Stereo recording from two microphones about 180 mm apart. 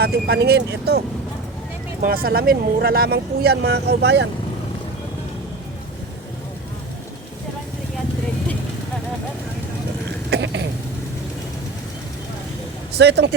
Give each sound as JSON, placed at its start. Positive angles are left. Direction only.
{"t": 0.0, "sound": "speech", "side_deg": -60}
{"t": 10.2, "sound": "a sound", "side_deg": -90}
{"t": 13.0, "sound": "speech", "side_deg": -70}